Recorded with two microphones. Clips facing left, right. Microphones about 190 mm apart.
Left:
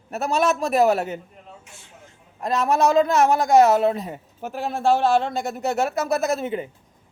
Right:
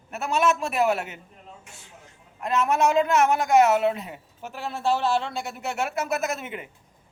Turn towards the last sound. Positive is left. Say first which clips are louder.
# left 7 dB
turn(degrees=35)  # may be behind; listen again after turning